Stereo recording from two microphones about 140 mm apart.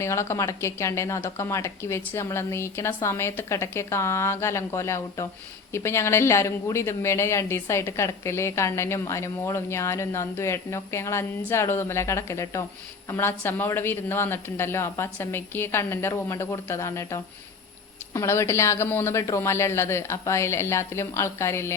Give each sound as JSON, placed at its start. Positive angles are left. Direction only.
{"t": 0.0, "sound": "speech", "side_deg": 20}